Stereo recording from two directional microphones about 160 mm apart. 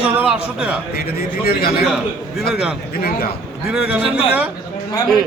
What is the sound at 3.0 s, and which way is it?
Speech, 70° left (ahead or behind).